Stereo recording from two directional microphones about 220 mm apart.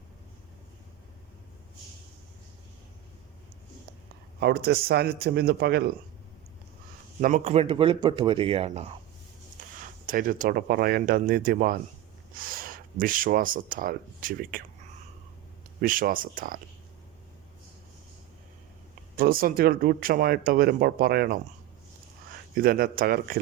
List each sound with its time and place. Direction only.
4.4 s a man's voice: 45° right (ahead or behind)
7.2 s speech: 35° right (ahead or behind)
9.6 s a sound: 35° right (ahead or behind)
10.1 s speech: 40° right (ahead or behind)
15.8 s speech: 40° right (ahead or behind)
19.1 s speech: 40° right (ahead or behind)
22.5 s speech: 40° right (ahead or behind)